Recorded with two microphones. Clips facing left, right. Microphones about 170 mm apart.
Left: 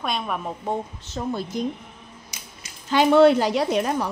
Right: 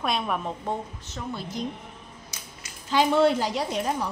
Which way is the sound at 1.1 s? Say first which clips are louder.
Left 7 dB; 35° left (ahead or behind).